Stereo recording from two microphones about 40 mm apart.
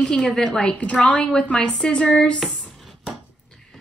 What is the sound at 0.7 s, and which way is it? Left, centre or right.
Speech, left.